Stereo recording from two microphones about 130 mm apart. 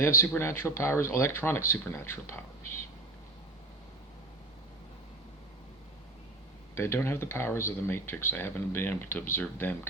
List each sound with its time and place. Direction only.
0.0 s speech: 20° left (ahead or behind)
6.7 s speech: 20° left (ahead or behind)